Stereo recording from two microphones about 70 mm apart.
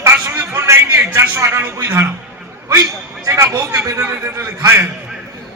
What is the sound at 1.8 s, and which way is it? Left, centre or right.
Speech, right.